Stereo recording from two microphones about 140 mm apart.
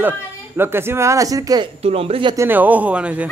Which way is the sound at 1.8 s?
45° right (ahead or behind).